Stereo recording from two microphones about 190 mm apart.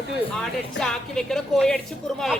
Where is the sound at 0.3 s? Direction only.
5° left (ahead or behind).